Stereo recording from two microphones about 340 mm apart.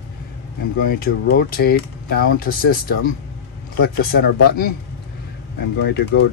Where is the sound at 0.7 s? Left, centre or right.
Left.